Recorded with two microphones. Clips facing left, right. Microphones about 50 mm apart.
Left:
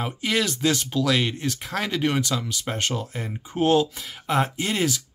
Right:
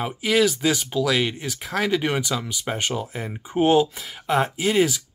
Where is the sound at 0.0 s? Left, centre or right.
Centre.